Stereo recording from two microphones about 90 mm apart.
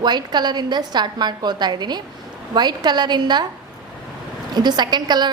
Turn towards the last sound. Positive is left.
turn(degrees=-50)  # may be behind; listen again after turning